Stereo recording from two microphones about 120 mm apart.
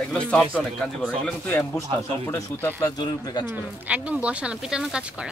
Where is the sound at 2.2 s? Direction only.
20° left (ahead or behind).